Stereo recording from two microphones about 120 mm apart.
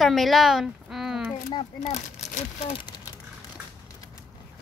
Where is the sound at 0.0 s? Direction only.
Centre (ahead or behind).